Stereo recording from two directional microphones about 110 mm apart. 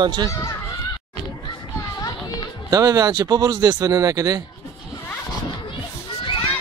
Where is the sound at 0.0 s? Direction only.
45° right (ahead or behind).